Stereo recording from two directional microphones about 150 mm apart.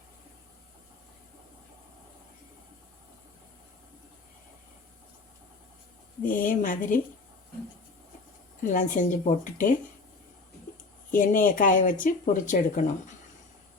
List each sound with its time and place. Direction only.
6.2 s speech: 60° left (ahead or behind)
8.6 s speech: 60° left (ahead or behind)
11.1 s speech: 65° left (ahead or behind)